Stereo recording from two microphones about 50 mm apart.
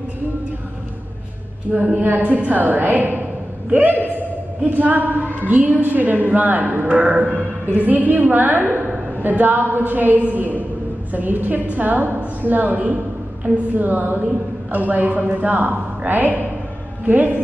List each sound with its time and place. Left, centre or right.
1.7 s a woman's voice: right
2.0 s a woman's voice: right